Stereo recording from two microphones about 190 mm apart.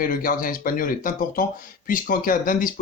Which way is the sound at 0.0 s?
45° left (ahead or behind).